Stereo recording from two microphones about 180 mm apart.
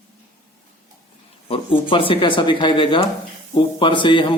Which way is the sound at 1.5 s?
30° left (ahead or behind).